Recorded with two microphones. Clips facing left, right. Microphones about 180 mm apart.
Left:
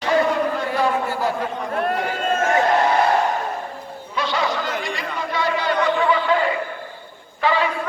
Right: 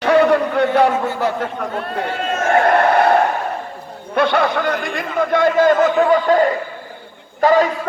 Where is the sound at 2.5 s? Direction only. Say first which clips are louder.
Right 6 dB; 60° right (ahead or behind).